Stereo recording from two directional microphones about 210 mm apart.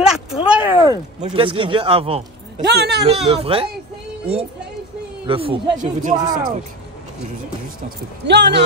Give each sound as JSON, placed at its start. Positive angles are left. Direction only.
{"t": 0.0, "sound": "a sound", "side_deg": -5}
{"t": 0.8, "sound": "speech", "side_deg": -20}
{"t": 2.6, "sound": "a woman's voice", "side_deg": -50}
{"t": 3.0, "sound": "speech", "side_deg": -25}
{"t": 8.3, "sound": "a woman's voice", "side_deg": -55}